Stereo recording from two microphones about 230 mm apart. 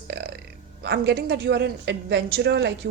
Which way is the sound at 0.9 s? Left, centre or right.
Right.